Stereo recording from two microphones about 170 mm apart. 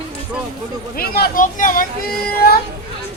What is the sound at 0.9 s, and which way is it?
Speech, 60° left (ahead or behind).